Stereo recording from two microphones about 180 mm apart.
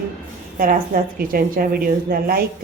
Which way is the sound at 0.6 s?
50° right (ahead or behind).